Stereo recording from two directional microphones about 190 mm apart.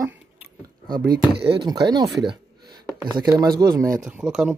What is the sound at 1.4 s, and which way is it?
Speech, 25° right (ahead or behind).